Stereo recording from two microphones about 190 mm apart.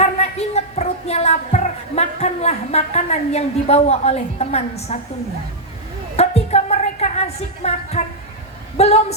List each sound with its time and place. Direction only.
0.0 s a sound: 35° left (ahead or behind)
6.1 s music: 35° left (ahead or behind)
8.8 s speech: 35° left (ahead or behind)